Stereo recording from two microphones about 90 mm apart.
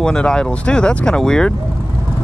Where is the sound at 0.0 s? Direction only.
10° left (ahead or behind).